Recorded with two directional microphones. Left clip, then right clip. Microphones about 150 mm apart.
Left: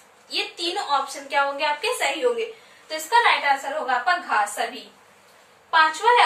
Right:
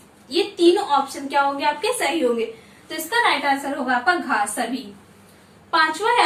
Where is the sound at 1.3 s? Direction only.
25° left (ahead or behind).